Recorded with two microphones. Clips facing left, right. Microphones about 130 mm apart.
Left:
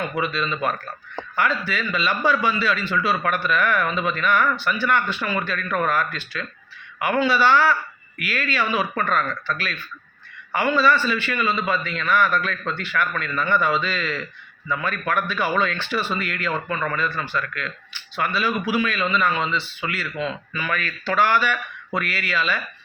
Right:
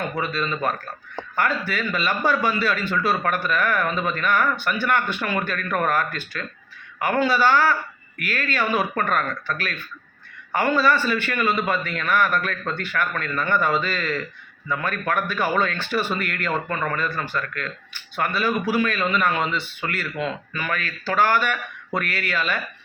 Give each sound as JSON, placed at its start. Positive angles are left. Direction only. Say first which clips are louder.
{"t": 0.2, "sound": "speech", "louder": "left 2 dB", "side_deg": -40}